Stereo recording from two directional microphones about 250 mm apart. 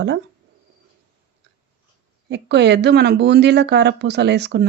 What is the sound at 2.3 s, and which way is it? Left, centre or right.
Speech, right.